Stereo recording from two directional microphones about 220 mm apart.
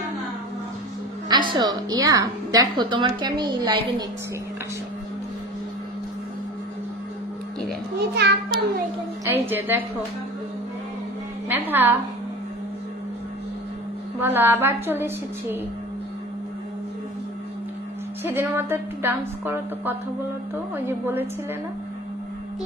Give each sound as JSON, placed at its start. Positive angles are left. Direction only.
{"t": 1.3, "sound": "a woman's voice", "side_deg": -20}
{"t": 8.0, "sound": "a child's voice", "side_deg": -50}
{"t": 9.2, "sound": "a woman's voice", "side_deg": -10}
{"t": 11.4, "sound": "a woman's voice", "side_deg": -10}
{"t": 14.2, "sound": "a woman's voice", "side_deg": -10}
{"t": 18.2, "sound": "a woman's voice", "side_deg": -10}